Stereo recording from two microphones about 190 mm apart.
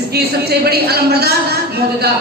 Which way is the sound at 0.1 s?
55° right (ahead or behind).